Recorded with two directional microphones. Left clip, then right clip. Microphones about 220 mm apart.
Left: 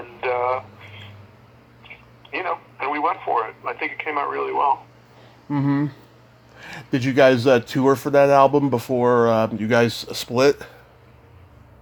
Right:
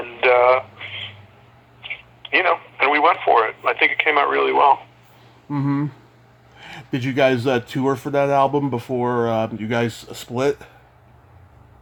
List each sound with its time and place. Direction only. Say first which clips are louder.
0.0 s a sound: right 8 dB; 25° right (ahead or behind)
2.3 s speech: right 8 dB; 25° right (ahead or behind)
5.5 s speech: left 1 dB; 5° right (ahead or behind)